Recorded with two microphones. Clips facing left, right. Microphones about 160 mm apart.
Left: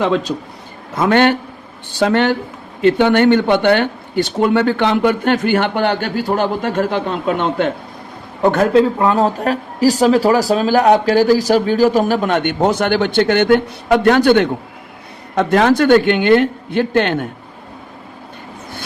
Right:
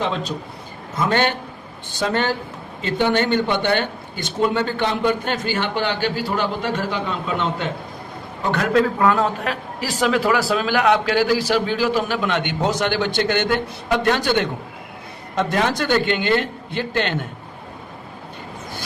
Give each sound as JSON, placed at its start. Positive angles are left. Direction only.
{"t": 0.0, "sound": "a man's voice", "side_deg": 75}
{"t": 0.9, "sound": "a man's voice", "side_deg": 55}
{"t": 8.7, "sound": "a man's voice", "side_deg": 30}